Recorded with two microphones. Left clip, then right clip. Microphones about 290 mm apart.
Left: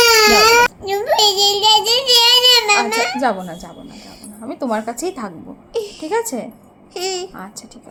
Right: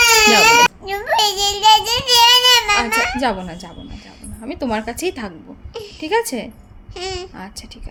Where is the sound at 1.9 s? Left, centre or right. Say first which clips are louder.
Even; centre.